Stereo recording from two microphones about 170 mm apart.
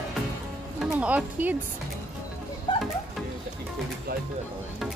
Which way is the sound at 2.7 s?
30° left (ahead or behind).